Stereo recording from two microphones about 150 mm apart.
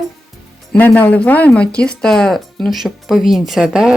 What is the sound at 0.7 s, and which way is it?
Speech, 10° left (ahead or behind).